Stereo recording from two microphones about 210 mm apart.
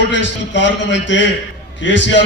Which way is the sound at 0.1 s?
60° left (ahead or behind).